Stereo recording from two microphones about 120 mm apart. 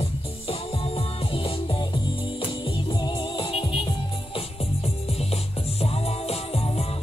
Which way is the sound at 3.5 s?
50° left (ahead or behind).